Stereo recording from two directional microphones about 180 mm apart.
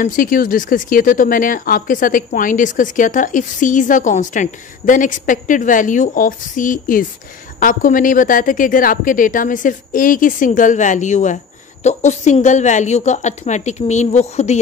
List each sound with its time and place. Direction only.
0.0 s a woman's voice: 50° left (ahead or behind)